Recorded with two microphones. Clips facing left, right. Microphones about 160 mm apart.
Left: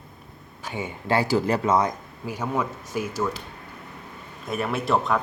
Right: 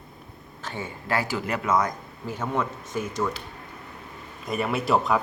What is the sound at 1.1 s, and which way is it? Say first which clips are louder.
Speech: left 6 dB; 35° left (ahead or behind).